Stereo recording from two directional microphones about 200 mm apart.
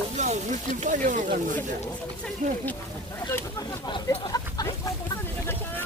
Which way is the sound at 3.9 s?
20° left (ahead or behind).